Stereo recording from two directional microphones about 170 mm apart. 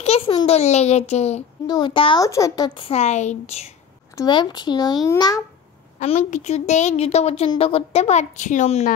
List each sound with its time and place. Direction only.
0.0 s a child's voice: 35° left (ahead or behind)
1.7 s speech: 30° left (ahead or behind)
2.2 s a woman's voice: 20° left (ahead or behind); by 3.7 s 40° left (ahead or behind)
4.1 s speech: 25° left (ahead or behind)
5.9 s a woman's voice: 40° left (ahead or behind)